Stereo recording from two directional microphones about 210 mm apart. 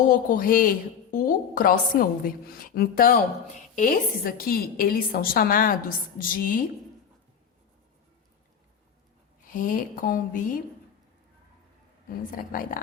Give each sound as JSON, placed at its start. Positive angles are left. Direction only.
{"t": 0.1, "sound": "a woman's voice", "side_deg": 40}
{"t": 9.5, "sound": "a woman's voice", "side_deg": 40}
{"t": 12.0, "sound": "a woman's voice", "side_deg": 45}